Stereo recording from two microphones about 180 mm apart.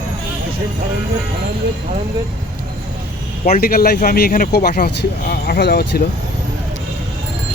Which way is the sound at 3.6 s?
55° left (ahead or behind).